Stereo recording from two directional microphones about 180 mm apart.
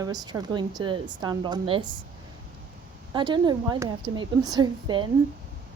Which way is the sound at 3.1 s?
25° right (ahead or behind).